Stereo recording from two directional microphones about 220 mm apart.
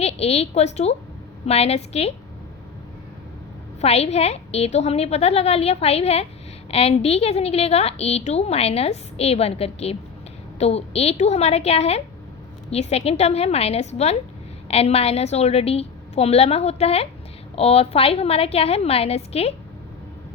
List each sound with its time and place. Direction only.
0.0 s a woman's voice: 30° left (ahead or behind)
3.8 s a woman's voice: 25° left (ahead or behind)